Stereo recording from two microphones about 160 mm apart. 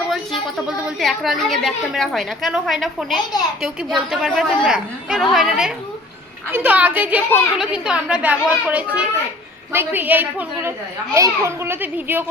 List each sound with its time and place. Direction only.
0.1 s a woman's voice: centre (ahead or behind)